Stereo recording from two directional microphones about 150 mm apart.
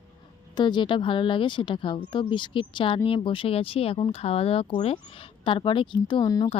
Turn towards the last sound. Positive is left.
turn(degrees=25)  # may be behind; listen again after turning